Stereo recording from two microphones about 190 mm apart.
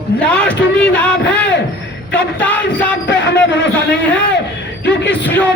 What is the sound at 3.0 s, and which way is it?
Speech, 65° left (ahead or behind).